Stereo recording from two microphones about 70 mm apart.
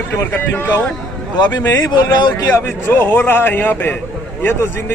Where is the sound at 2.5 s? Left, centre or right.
Left.